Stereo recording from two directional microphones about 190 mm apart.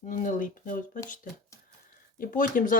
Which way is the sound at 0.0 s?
45° left (ahead or behind).